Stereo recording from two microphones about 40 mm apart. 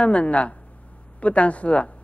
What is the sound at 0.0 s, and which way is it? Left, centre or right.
A man's voice, left.